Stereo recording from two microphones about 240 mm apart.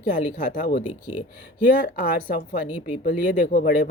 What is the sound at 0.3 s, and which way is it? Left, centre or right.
Speech, left.